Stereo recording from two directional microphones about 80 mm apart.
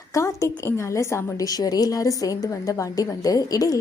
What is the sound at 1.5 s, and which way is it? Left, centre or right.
A woman's voice, left.